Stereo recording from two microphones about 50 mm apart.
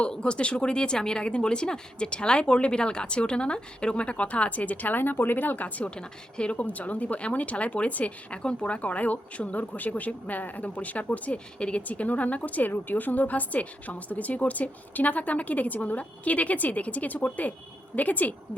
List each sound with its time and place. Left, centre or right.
0.1 s speech: centre
5.9 s speech: centre